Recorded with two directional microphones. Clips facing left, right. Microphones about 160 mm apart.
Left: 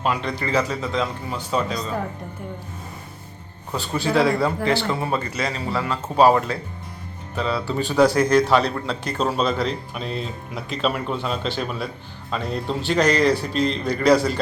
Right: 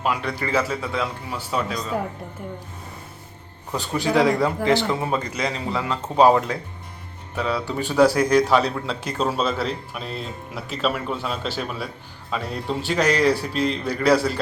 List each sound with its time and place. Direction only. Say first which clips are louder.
0.0 s speech: left 1 dB; 10° right (ahead or behind)
3.8 s speech: even; 15° right (ahead or behind)
5.4 s a man's voice: even; 5° left (ahead or behind)
6.1 s a man's voice: even; 15° right (ahead or behind)